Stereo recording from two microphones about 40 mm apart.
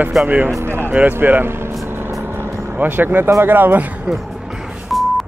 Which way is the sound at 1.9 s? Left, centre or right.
Right.